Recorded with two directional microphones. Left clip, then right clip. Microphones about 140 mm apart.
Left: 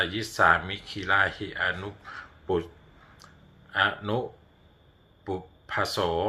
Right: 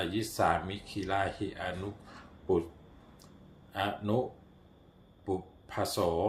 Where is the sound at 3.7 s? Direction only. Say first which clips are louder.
Left 8 dB; 40° right (ahead or behind).